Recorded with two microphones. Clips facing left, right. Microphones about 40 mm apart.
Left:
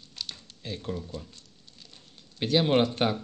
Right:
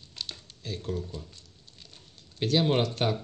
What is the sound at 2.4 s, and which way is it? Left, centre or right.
Speech, centre.